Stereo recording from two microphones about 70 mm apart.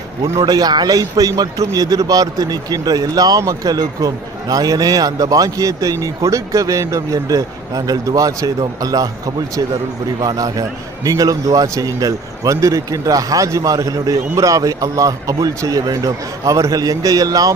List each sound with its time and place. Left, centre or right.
0.3 s a man's voice: right